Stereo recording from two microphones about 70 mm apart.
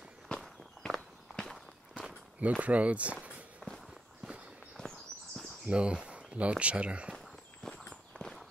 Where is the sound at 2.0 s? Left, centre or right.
Centre.